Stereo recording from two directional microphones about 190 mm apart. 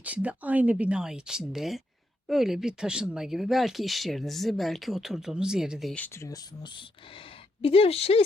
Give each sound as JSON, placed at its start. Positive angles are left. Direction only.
{"t": 0.0, "sound": "a woman's voice", "side_deg": -5}